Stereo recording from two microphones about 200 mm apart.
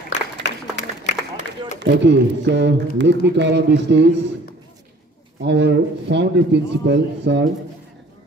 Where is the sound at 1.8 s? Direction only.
60° right (ahead or behind).